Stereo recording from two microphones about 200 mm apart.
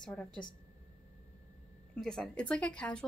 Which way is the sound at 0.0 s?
5° left (ahead or behind).